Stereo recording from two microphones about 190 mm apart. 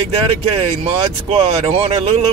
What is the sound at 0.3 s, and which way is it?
Speech, 30° right (ahead or behind).